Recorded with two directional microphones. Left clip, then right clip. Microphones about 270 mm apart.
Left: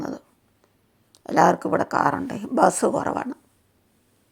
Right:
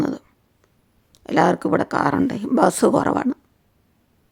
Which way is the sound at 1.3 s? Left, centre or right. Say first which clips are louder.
Right 1 dB; right.